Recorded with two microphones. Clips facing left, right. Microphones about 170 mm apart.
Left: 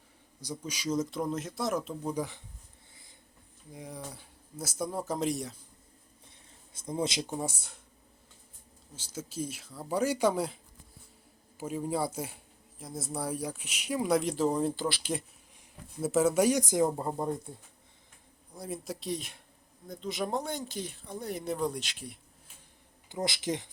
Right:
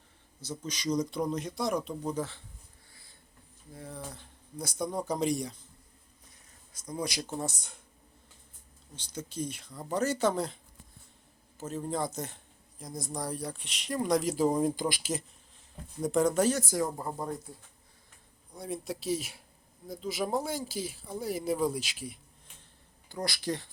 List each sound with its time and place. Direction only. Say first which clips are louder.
0.6 s speech: right 1 dB; 10° left (ahead or behind)
3.7 s speech: even; 15° left (ahead or behind)
6.7 s speech: left 3 dB; 25° left (ahead or behind)
7.3 s speech: even; 10° left (ahead or behind)
9.0 s speech: even; 5° left (ahead or behind)
11.6 s speech: left 2 dB; 10° left (ahead or behind); by 15.1 s 10° right (ahead or behind)
16.0 s speech: left 1 dB; 5° left (ahead or behind); by 17.5 s 20° left (ahead or behind)
18.5 s speech: right 2 dB; centre (ahead or behind)
23.0 s speech: left 1 dB; 20° left (ahead or behind)